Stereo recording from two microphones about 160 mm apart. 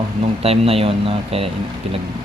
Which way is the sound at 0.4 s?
40° right (ahead or behind).